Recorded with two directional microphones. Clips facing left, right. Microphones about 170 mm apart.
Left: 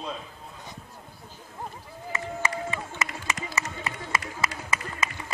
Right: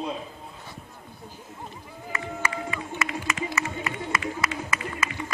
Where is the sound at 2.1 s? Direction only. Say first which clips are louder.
Even; 25° left (ahead or behind).